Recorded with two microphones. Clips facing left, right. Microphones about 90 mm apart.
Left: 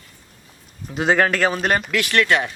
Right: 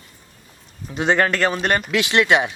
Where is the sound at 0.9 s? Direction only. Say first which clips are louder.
Even; centre (ahead or behind).